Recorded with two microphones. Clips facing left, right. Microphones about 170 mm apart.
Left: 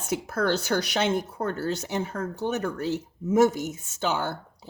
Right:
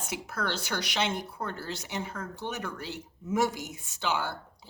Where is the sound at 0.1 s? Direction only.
45° left (ahead or behind).